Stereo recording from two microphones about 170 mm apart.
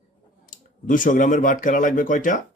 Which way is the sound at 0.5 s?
50° left (ahead or behind).